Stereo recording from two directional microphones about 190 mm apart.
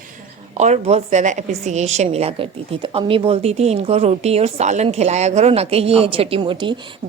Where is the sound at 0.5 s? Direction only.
35° right (ahead or behind).